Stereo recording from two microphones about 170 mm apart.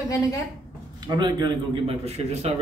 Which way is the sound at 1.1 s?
25° right (ahead or behind).